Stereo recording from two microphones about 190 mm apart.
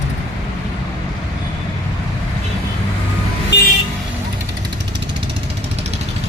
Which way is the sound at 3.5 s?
70° left (ahead or behind).